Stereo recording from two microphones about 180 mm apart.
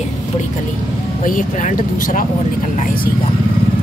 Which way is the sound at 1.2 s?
45° left (ahead or behind).